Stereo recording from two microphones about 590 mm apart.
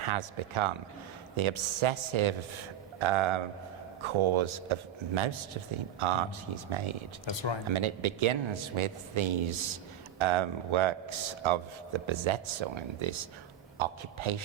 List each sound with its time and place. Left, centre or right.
0.0 s a man's voice: right
7.3 s speech: left
7.7 s a man's voice: right